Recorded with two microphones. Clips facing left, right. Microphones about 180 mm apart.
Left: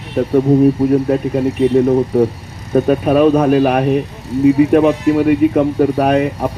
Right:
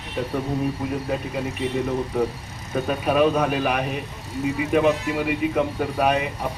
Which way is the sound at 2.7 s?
45° left (ahead or behind).